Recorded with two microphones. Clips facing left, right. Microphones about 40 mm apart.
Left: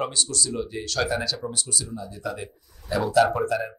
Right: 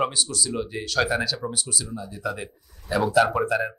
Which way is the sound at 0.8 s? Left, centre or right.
Centre.